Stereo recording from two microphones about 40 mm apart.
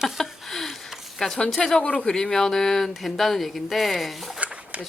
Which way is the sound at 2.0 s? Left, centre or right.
Centre.